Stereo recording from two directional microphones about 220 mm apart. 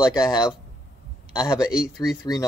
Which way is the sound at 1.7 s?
5° right (ahead or behind).